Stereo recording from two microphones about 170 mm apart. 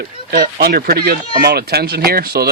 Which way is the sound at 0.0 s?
55° right (ahead or behind).